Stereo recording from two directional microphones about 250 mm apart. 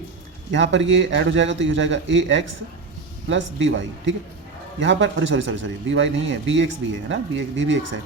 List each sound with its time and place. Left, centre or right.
0.5 s a man's voice: right